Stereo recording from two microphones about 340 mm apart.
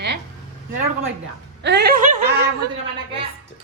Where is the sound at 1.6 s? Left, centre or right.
Right.